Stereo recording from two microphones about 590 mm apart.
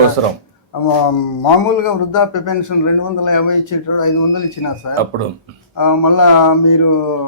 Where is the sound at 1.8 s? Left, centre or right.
Left.